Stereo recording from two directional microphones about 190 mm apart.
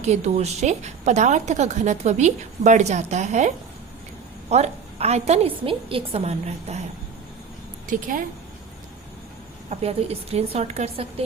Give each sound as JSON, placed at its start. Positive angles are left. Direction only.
{"t": 0.0, "sound": "a woman's voice", "side_deg": -35}
{"t": 7.9, "sound": "speech", "side_deg": -45}
{"t": 9.6, "sound": "a woman's voice", "side_deg": -35}